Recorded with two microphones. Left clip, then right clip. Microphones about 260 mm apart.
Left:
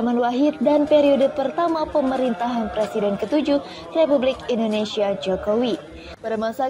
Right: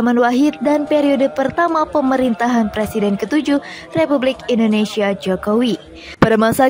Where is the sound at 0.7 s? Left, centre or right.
Right.